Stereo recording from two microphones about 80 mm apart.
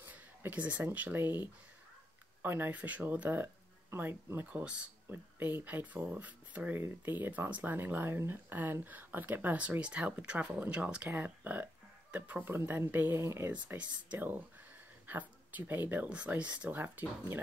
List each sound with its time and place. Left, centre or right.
0.0 s speech: right
2.4 s speech: right
4.5 s speech: centre
13.2 s speech: right